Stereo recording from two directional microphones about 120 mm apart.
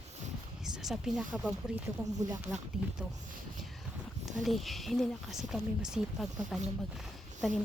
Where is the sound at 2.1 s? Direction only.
30° right (ahead or behind).